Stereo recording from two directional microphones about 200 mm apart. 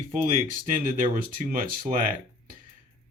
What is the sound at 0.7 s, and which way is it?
Speech, 40° right (ahead or behind).